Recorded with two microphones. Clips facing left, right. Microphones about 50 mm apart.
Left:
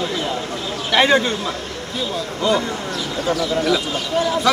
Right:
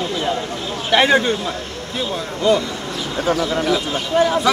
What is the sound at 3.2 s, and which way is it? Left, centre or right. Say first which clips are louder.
Speech: right 1 dB; right.